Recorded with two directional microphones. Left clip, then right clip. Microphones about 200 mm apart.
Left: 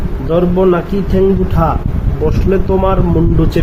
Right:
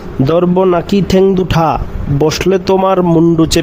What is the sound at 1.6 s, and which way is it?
Speech, 45° right (ahead or behind).